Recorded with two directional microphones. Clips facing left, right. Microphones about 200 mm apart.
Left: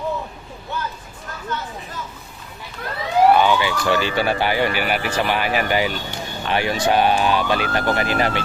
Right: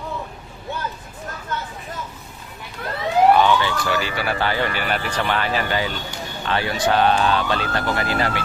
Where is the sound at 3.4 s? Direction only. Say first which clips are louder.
Even; 10° left (ahead or behind).